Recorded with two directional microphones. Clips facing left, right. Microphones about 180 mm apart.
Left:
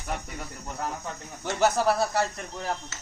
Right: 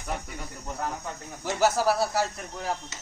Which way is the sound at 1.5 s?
5° right (ahead or behind).